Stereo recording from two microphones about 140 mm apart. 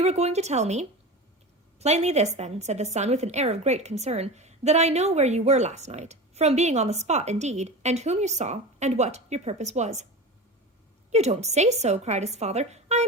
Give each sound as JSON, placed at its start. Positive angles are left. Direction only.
{"t": 0.0, "sound": "a woman's voice", "side_deg": -50}
{"t": 11.1, "sound": "a woman's voice", "side_deg": -50}